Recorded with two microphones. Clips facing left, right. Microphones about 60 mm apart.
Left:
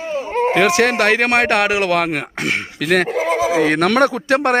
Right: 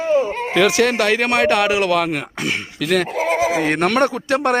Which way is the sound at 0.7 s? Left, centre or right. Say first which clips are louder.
Left 2 dB; left.